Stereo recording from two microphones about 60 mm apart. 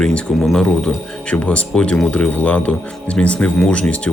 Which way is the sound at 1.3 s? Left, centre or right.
Left.